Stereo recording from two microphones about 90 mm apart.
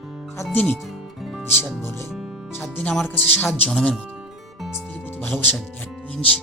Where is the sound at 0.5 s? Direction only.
20° left (ahead or behind).